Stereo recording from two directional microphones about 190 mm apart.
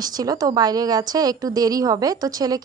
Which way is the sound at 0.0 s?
20° right (ahead or behind).